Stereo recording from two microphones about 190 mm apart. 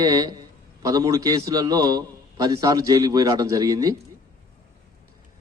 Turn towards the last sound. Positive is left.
turn(degrees=-20)  # may be behind; listen again after turning